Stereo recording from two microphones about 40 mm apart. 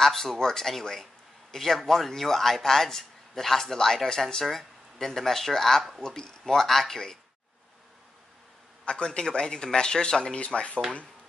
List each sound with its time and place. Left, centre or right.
0.0 s a man's voice: centre
8.8 s speech: left